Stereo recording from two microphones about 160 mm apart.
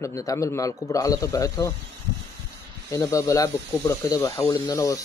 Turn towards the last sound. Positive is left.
turn(degrees=20)  # may be behind; listen again after turning